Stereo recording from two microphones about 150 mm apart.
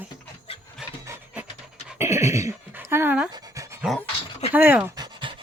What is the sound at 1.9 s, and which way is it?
Speech, 20° right (ahead or behind).